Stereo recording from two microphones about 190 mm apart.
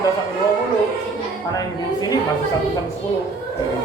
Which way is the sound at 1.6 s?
20° left (ahead or behind).